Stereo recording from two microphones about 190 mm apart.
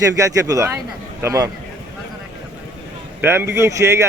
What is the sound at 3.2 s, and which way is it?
Speech, 10° right (ahead or behind).